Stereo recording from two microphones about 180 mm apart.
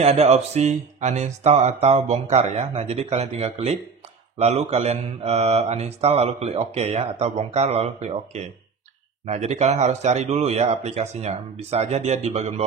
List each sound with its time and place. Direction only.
0.0 s speech: 35° right (ahead or behind)